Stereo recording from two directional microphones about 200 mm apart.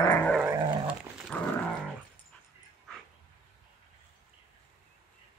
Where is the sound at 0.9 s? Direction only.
5° right (ahead or behind).